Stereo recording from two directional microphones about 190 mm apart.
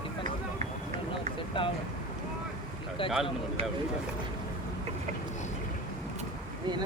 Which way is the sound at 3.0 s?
30° left (ahead or behind).